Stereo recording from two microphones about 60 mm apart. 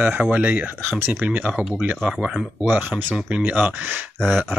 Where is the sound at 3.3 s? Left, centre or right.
Right.